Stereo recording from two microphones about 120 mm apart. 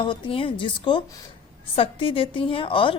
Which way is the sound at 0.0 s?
45° left (ahead or behind).